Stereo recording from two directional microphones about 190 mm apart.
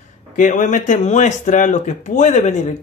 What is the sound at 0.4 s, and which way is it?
Speech, 40° left (ahead or behind).